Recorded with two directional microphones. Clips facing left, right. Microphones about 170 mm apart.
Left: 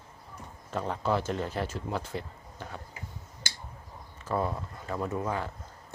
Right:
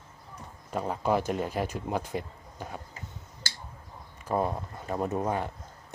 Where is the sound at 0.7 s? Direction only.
10° right (ahead or behind).